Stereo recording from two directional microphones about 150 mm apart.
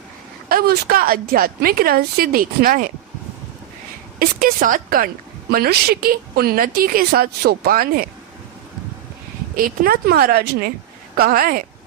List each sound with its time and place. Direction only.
0.4 s a woman's voice: 85° right
4.2 s a woman's voice: 75° right (ahead or behind)
9.6 s speech: 70° right (ahead or behind); by 10.7 s 90° right
11.2 s a woman's voice: 80° right